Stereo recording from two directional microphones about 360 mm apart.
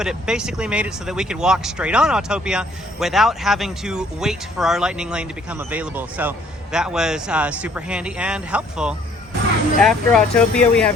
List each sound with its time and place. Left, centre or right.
0.0 s speech: centre